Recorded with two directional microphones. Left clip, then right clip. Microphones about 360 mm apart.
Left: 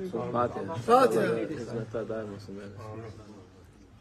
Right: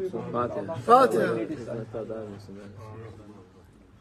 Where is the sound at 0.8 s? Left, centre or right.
Centre.